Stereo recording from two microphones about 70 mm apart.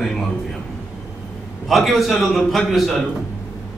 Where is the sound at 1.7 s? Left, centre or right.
Centre.